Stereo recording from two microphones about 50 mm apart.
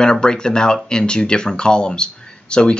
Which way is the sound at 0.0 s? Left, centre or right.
Centre.